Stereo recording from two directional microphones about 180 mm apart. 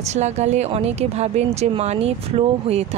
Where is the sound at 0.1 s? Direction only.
40° right (ahead or behind).